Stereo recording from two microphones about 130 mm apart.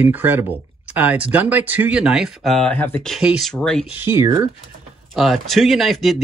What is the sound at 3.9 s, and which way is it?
Speech, 15° right (ahead or behind).